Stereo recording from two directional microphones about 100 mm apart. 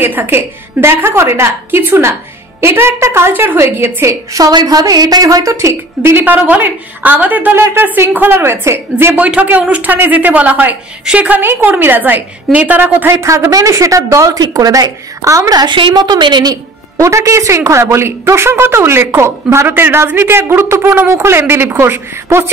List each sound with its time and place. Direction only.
0.0 s a woman's voice: 20° right (ahead or behind); by 16.5 s 50° right (ahead or behind)
16.9 s a woman's voice: 30° right (ahead or behind)